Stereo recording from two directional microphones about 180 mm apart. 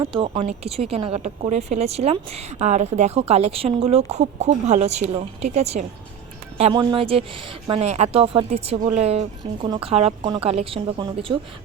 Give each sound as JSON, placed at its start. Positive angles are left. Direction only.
{"t": 0.1, "sound": "speech", "side_deg": -35}
{"t": 9.6, "sound": "speech", "side_deg": -20}